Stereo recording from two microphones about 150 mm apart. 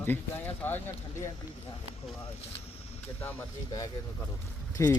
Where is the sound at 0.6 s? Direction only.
15° left (ahead or behind).